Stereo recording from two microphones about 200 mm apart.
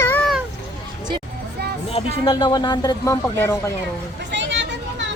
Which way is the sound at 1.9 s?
30° left (ahead or behind).